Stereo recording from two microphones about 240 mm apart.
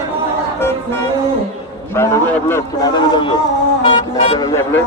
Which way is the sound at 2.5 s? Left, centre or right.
Centre.